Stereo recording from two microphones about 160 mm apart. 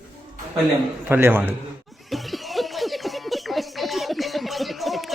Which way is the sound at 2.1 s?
Centre (ahead or behind).